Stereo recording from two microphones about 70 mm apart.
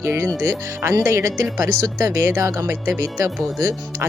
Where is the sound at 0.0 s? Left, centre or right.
Right.